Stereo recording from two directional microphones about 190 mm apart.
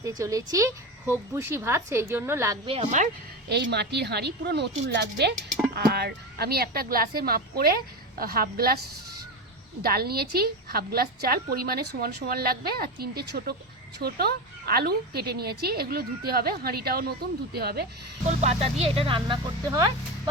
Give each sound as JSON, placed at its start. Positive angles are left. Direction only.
{"t": 0.0, "sound": "a woman's voice", "side_deg": -20}
{"t": 2.6, "sound": "speech", "side_deg": -35}
{"t": 3.5, "sound": "a woman's voice", "side_deg": -60}
{"t": 5.3, "sound": "speech", "side_deg": 0}
{"t": 5.7, "sound": "a woman's voice", "side_deg": -55}
{"t": 9.8, "sound": "a woman's voice", "side_deg": -55}
{"t": 18.3, "sound": "speech", "side_deg": -35}